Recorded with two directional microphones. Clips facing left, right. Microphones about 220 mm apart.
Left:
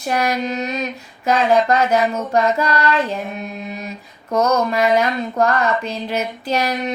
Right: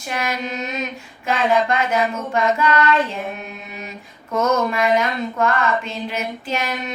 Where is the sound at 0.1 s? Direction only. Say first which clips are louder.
Left 5 dB; 40° left (ahead or behind).